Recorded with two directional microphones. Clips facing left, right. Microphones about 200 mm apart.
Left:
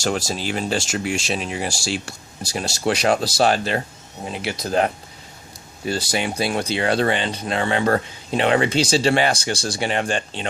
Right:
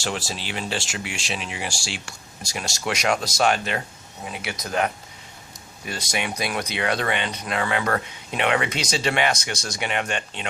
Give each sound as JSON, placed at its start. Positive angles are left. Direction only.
{"t": 0.0, "sound": "speech", "side_deg": 40}